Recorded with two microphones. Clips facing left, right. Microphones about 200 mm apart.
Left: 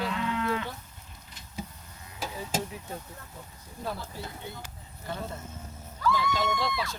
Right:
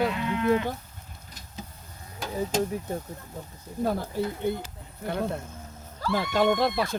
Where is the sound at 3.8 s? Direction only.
45° right (ahead or behind).